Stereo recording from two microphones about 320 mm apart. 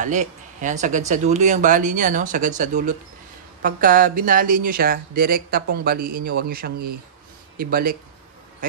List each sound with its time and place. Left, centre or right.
0.0 s speech: right